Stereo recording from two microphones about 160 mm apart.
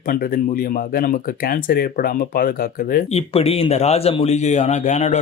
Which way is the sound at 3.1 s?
40° left (ahead or behind).